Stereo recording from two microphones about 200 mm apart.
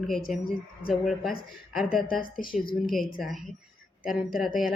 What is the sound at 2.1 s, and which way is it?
Speech, 45° left (ahead or behind).